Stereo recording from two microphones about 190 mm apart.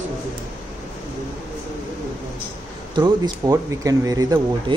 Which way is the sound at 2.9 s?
20° right (ahead or behind).